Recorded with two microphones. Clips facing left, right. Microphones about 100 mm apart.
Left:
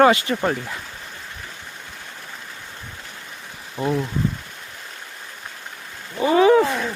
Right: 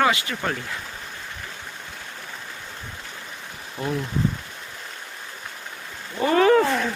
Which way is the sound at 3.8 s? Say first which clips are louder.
Left 5 dB; 20° left (ahead or behind).